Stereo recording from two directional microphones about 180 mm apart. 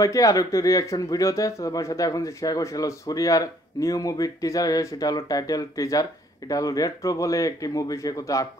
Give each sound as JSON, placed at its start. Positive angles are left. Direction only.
{"t": 0.0, "sound": "speech", "side_deg": 20}